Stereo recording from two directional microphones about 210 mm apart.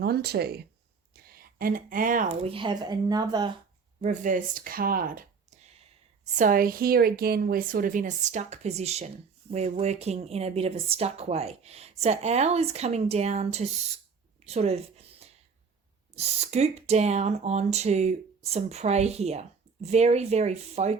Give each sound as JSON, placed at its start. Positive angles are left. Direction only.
{"t": 0.0, "sound": "speech", "side_deg": -50}
{"t": 4.0, "sound": "a woman's voice", "side_deg": -35}
{"t": 14.4, "sound": "a sound", "side_deg": -30}
{"t": 16.1, "sound": "a woman's voice", "side_deg": -30}